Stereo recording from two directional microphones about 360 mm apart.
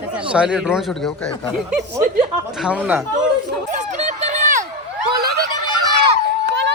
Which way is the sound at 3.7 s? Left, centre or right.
Centre.